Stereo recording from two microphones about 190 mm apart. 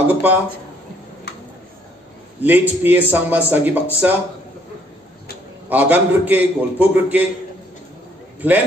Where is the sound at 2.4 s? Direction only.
10° right (ahead or behind).